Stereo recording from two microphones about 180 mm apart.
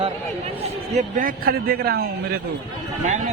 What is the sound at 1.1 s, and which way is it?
Speech, 50° right (ahead or behind).